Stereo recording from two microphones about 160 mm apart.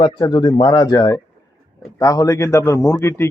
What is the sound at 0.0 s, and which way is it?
Speech, 25° left (ahead or behind).